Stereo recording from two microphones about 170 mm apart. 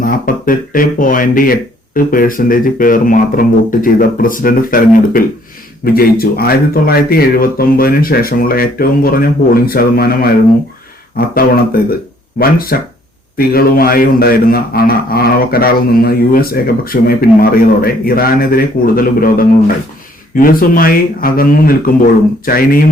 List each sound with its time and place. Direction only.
0.0 s a man's voice: 55° left (ahead or behind)
11.3 s a man's voice: 60° left (ahead or behind)